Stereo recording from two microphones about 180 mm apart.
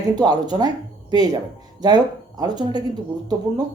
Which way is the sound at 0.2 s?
20° right (ahead or behind).